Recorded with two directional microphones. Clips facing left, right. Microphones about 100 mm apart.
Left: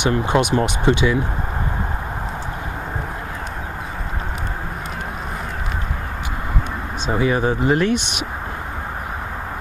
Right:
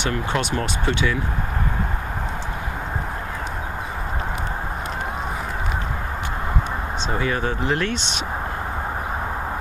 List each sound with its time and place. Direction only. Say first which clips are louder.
0.0 s speech: left 6 dB; 20° left (ahead or behind)
7.1 s speech: left 6 dB; 15° left (ahead or behind)